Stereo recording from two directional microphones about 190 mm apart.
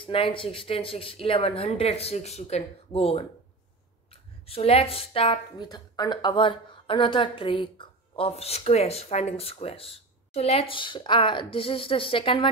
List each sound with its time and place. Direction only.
0.0 s speech: 30° left (ahead or behind)